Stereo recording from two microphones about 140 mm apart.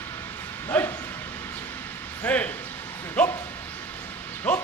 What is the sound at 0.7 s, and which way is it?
Bow-wow, 15° left (ahead or behind).